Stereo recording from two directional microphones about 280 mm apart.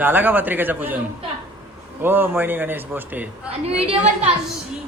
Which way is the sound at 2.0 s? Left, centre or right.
Centre.